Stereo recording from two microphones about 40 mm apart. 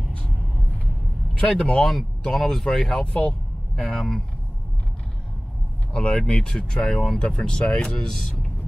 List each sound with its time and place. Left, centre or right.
1.4 s speech: left
3.8 s speech: centre
5.9 s speech: left
8.0 s speech: centre